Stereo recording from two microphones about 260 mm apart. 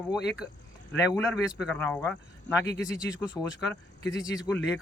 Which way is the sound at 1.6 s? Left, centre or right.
Centre.